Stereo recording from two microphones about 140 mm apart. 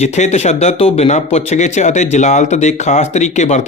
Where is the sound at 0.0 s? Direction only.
50° left (ahead or behind).